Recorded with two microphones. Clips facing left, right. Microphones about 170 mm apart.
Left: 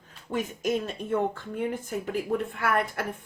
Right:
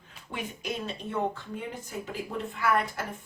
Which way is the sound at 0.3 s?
45° left (ahead or behind).